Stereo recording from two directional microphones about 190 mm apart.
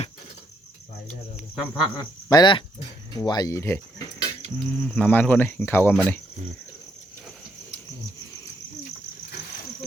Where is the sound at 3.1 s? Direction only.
20° left (ahead or behind).